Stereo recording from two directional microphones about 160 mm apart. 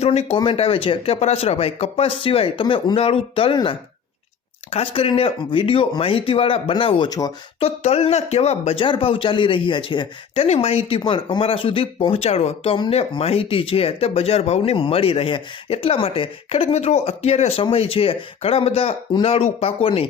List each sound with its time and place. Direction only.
0.0 s speech: 40° left (ahead or behind); by 7.3 s 25° left (ahead or behind)
7.6 s speech: 40° left (ahead or behind)